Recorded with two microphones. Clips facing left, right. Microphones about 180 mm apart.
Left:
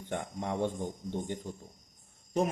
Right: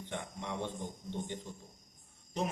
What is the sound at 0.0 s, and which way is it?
Speech, 45° left (ahead or behind).